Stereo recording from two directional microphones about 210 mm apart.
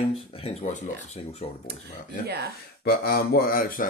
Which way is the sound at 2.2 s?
50° right (ahead or behind).